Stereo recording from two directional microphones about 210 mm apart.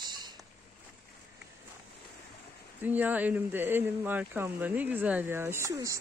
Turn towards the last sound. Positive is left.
turn(degrees=-15)  # may be behind; listen again after turning